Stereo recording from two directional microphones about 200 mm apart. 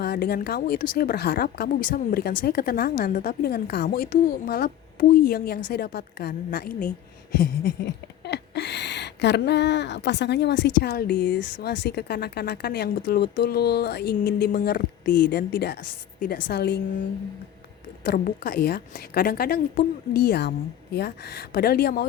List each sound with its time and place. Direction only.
0.0 s a woman's voice: 50° left (ahead or behind)
8.2 s speech: 55° left (ahead or behind)
18.0 s a woman's voice: 45° left (ahead or behind)